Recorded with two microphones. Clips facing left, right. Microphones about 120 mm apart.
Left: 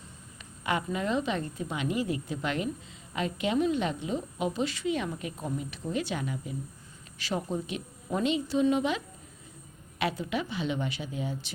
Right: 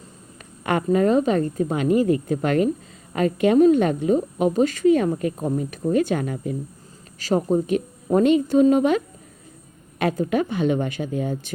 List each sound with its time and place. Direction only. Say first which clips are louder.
0.6 s a woman's voice: right 11 dB; 50° right (ahead or behind)